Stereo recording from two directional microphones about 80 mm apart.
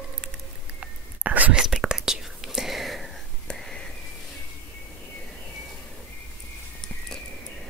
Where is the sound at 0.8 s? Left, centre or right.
Centre.